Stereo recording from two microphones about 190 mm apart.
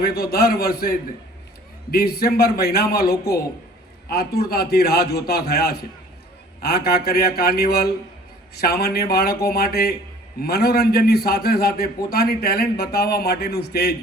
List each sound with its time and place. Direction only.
0.0 s a man's voice: 55° left (ahead or behind)